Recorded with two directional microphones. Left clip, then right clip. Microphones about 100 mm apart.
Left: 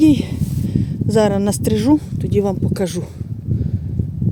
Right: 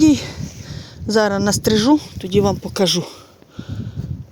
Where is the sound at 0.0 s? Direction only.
30° left (ahead or behind).